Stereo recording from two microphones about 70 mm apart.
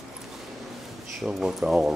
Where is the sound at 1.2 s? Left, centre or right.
Centre.